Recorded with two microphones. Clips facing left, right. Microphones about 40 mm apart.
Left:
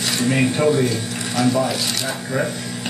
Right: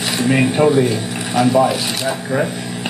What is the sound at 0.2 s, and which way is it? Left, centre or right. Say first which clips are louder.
Speech: right 4 dB; centre.